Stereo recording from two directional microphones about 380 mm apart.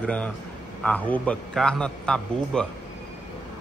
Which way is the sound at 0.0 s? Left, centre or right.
Centre.